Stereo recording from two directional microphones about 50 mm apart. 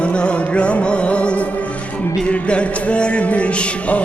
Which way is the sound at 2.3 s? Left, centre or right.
Left.